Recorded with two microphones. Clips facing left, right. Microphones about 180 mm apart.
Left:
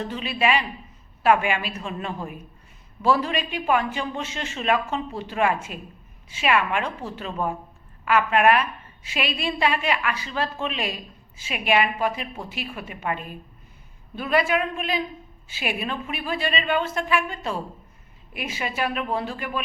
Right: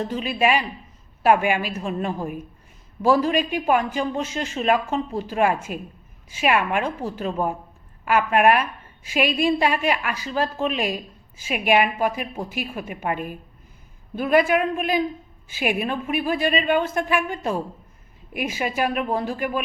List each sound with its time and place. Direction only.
0.1 s a man's voice: 45° right (ahead or behind)
14.2 s a man's voice: 50° right (ahead or behind)